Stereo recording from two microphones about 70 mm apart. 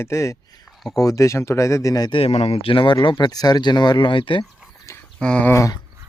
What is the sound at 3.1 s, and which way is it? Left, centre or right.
Speech, left.